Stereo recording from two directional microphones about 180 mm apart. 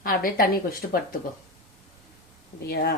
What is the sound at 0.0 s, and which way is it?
Speech, 55° left (ahead or behind).